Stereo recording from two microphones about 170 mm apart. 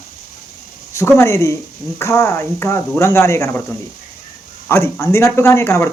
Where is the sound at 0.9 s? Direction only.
15° left (ahead or behind).